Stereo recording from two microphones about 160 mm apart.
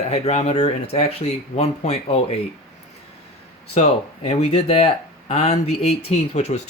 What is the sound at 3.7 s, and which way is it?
Speech, 40° left (ahead or behind).